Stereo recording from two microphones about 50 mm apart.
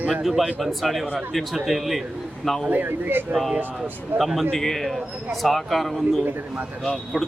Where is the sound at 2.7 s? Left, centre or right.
Right.